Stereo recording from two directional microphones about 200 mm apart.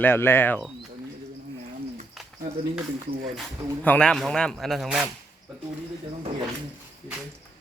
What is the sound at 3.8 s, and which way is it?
Speech, 5° left (ahead or behind).